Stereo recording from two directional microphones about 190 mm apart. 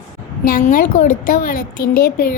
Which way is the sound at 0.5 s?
45° left (ahead or behind).